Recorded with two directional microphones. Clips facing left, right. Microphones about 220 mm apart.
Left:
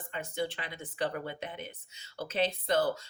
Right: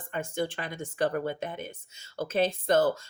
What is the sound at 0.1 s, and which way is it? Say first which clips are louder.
Speech: right 4 dB; 50° right (ahead or behind).